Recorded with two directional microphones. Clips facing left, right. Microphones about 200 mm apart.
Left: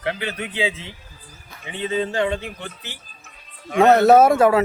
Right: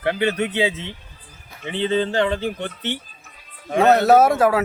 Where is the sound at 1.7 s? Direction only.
30° right (ahead or behind).